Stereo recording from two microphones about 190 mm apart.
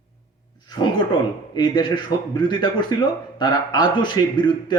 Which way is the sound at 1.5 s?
25° left (ahead or behind).